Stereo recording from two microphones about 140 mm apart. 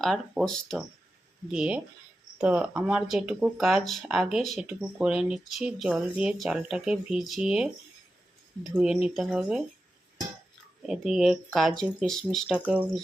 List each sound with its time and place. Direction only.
0.0 s speech: 5° left (ahead or behind)
1.5 s speech: 5° right (ahead or behind)
8.8 s speech: 5° right (ahead or behind)
10.8 s speech: 5° right (ahead or behind)
12.6 s speech: 10° right (ahead or behind)